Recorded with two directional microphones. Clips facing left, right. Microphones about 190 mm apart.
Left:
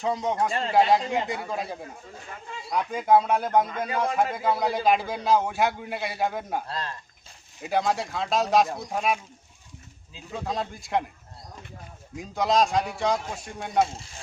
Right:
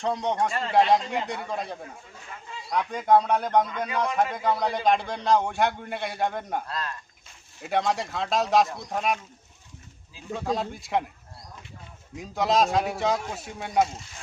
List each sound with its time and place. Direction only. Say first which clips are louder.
0.0 s a man's voice: even; centre (ahead or behind)
6.7 s speech: even; 30° left (ahead or behind)
7.6 s a man's voice: even; centre (ahead or behind)
10.3 s a man's voice: right 2 dB; centre (ahead or behind)
12.1 s a man's voice: even; centre (ahead or behind)